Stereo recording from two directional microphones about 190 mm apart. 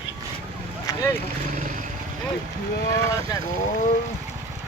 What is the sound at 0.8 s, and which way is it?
Boat, 15° left (ahead or behind).